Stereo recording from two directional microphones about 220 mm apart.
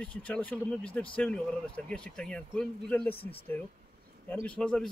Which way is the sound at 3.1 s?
25° left (ahead or behind).